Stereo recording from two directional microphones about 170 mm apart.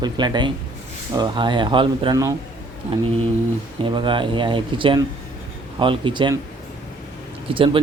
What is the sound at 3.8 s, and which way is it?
Speech, 30° right (ahead or behind).